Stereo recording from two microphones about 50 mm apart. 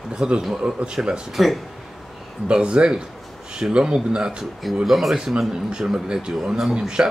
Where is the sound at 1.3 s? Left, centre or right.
Centre.